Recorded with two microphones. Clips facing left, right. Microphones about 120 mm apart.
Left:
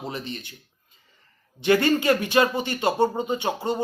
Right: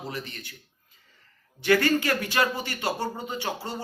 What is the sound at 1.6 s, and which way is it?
A man's voice, 20° left (ahead or behind).